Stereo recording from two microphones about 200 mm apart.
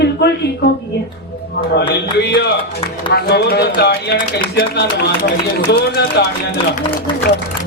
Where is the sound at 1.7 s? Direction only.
55° left (ahead or behind).